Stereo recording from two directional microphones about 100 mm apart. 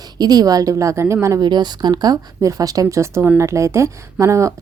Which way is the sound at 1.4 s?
45° right (ahead or behind).